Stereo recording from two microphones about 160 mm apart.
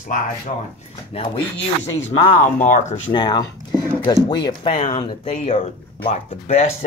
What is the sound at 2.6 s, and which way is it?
Speech, 50° left (ahead or behind).